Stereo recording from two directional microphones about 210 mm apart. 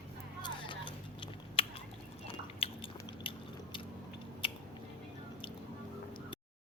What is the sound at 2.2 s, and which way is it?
Chewing, 25° left (ahead or behind).